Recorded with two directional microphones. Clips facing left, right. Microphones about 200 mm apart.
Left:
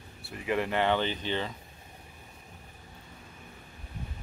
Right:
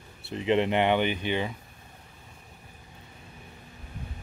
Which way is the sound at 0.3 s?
25° right (ahead or behind).